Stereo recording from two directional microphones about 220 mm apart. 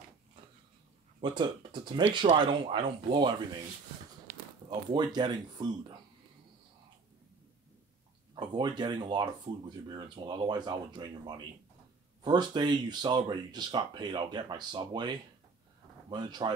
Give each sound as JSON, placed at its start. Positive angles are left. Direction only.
{"t": 1.2, "sound": "speech", "side_deg": -20}
{"t": 4.3, "sound": "a sound", "side_deg": -35}
{"t": 4.6, "sound": "speech", "side_deg": -20}
{"t": 8.4, "sound": "speech", "side_deg": -20}